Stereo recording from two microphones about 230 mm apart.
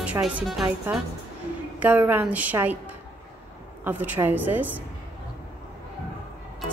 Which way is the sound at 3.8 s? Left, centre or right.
Centre.